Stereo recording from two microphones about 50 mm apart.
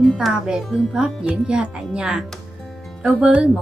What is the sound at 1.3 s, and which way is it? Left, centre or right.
Speech, centre.